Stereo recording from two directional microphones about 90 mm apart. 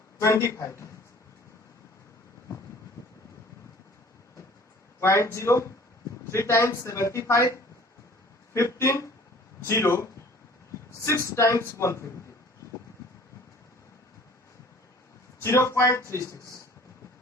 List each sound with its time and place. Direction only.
0.2 s speech: 35° left (ahead or behind)
4.9 s speech: 30° left (ahead or behind)
15.4 s speech: 35° left (ahead or behind)